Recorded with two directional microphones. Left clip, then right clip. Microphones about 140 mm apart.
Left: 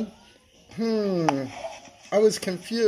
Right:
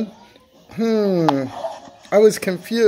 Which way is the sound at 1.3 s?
30° right (ahead or behind).